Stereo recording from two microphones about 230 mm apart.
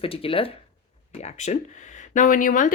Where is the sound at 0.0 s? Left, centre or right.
Left.